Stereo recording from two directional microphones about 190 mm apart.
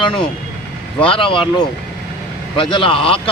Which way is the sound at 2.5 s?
25° left (ahead or behind).